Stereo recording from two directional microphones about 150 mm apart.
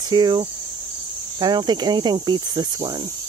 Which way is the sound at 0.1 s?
30° right (ahead or behind).